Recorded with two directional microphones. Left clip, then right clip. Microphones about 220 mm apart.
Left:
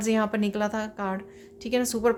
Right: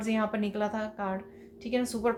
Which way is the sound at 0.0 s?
45° left (ahead or behind).